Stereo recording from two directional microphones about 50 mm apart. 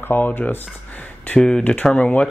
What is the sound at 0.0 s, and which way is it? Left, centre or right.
Cutlery, left.